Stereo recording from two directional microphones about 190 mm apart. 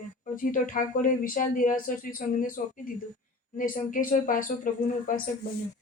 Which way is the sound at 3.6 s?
45° left (ahead or behind).